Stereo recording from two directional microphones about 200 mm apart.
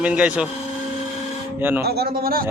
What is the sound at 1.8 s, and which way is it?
Speech, 50° right (ahead or behind).